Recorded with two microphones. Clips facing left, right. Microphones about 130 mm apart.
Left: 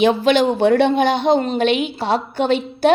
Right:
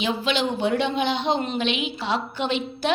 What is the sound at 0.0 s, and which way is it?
A woman's voice, 55° left (ahead or behind).